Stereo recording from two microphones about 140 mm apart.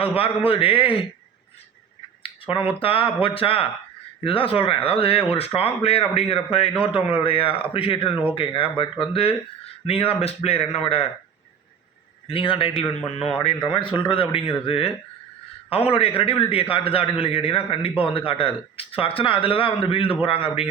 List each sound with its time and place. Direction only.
0.0 s a man's voice: 40° left (ahead or behind)
2.6 s a man's voice: 40° left (ahead or behind)
12.3 s a man's voice: 40° left (ahead or behind)